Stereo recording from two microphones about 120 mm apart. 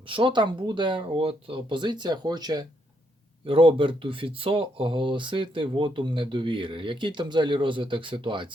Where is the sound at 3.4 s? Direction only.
50° right (ahead or behind).